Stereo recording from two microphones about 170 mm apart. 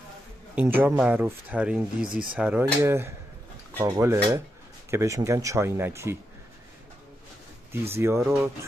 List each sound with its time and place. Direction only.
0.6 s speech: 10° right (ahead or behind)
7.9 s speech: 15° right (ahead or behind)